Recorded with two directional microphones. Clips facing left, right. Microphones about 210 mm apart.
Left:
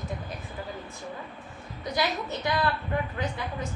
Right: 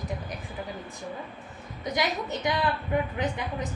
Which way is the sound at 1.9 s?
15° right (ahead or behind).